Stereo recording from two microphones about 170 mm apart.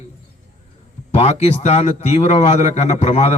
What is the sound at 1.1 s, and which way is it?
A man's voice, 40° left (ahead or behind).